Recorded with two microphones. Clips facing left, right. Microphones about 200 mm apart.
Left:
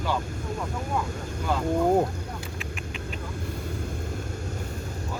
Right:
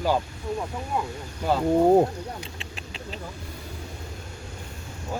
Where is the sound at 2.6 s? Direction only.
30° right (ahead or behind).